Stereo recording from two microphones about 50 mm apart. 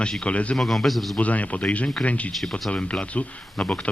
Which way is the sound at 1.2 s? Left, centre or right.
Left.